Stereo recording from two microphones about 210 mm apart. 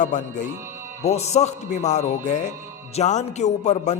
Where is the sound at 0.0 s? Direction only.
35° left (ahead or behind).